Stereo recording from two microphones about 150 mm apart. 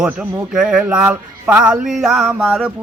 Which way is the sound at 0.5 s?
5° right (ahead or behind).